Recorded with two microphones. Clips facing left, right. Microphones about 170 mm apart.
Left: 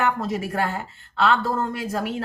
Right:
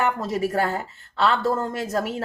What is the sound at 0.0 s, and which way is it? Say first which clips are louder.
Speech: right 1 dB; 40° right (ahead or behind).